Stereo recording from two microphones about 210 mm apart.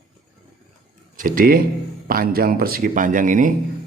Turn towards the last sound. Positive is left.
turn(degrees=-40)  # may be behind; listen again after turning